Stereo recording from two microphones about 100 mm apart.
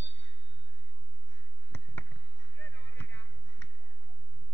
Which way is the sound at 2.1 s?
75° left (ahead or behind).